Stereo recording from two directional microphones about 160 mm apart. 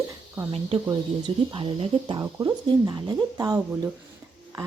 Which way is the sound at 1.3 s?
35° right (ahead or behind).